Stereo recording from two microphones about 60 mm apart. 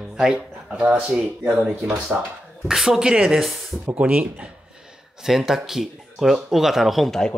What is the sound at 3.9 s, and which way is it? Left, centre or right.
Speech, right.